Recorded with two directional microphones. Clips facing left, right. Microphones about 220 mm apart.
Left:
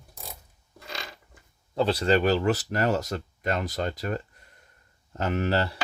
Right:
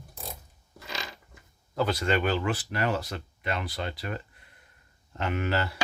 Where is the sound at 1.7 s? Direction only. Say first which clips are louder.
Left 4 dB; 30° left (ahead or behind).